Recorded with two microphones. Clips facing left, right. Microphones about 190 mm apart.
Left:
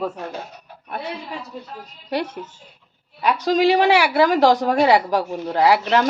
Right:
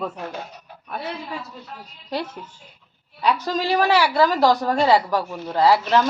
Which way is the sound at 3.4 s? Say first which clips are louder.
Left 6 dB; 90° left.